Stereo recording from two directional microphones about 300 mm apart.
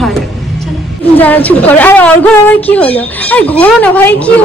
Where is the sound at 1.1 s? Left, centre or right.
Centre.